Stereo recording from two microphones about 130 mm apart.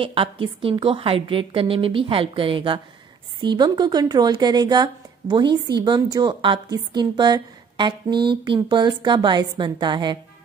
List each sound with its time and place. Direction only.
0.0 s a woman's voice: 45° right (ahead or behind)